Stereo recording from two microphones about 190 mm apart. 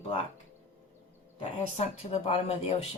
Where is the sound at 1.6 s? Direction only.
35° left (ahead or behind).